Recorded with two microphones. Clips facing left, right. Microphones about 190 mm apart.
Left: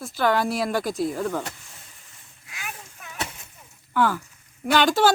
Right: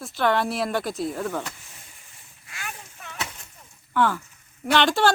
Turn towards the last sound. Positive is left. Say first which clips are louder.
# left 1 dB
turn(degrees=0)  # may be behind; listen again after turning